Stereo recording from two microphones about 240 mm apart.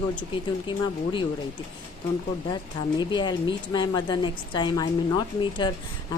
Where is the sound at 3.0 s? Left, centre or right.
Centre.